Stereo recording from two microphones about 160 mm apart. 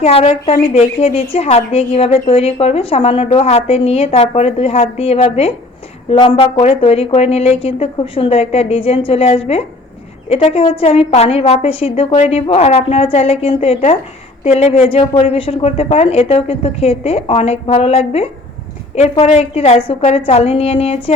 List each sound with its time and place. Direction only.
0.0 s a woman's voice: 40° left (ahead or behind)